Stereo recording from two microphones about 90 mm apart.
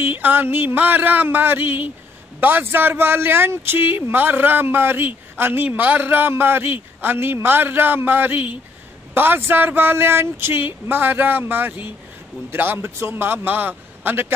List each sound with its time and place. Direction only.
0.0 s speech: 20° right (ahead or behind)